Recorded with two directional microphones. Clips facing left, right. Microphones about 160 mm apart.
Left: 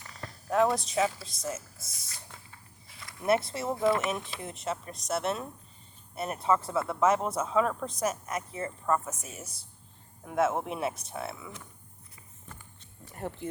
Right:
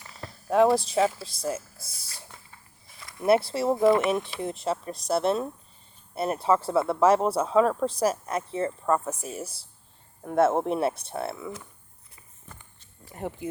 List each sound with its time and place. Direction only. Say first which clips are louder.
0.2 s speech: right 5 dB; 30° right (ahead or behind)
13.1 s speech: right 3 dB; 15° right (ahead or behind)